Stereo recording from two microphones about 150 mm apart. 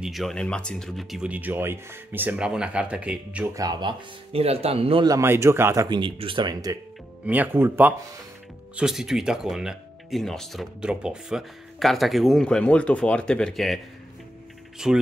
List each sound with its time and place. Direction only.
0.0 s speech: centre (ahead or behind)
3.5 s speech: 25° right (ahead or behind)
4.3 s speech: 40° right (ahead or behind)
5.0 s speech: 20° right (ahead or behind)
5.9 s speech: 30° right (ahead or behind)
7.2 s speech: 10° right (ahead or behind)
8.7 s speech: 5° right (ahead or behind)
14.8 s speech: 5° right (ahead or behind)